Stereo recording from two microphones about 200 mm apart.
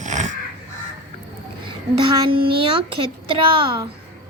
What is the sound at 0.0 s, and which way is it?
Crow, 35° right (ahead or behind).